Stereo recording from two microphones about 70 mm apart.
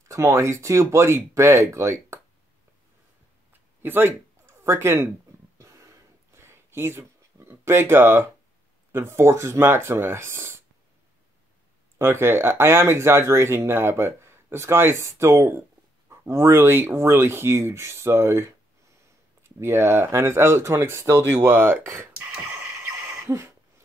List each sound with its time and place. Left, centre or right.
0.1 s speech: right
3.8 s speech: right
5.6 s a sound: right
8.9 s speech: right
12.0 s speech: right
23.2 s owl: right